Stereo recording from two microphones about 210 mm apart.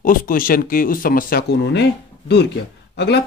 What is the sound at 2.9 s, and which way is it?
Speech, 55° left (ahead or behind).